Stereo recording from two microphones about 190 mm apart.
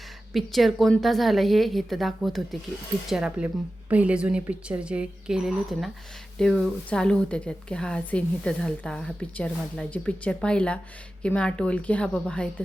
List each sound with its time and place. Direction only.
0.3 s a woman's voice: centre (ahead or behind)